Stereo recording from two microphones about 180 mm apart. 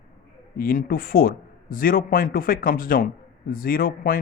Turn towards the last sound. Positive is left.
turn(degrees=55)  # may be behind; listen again after turning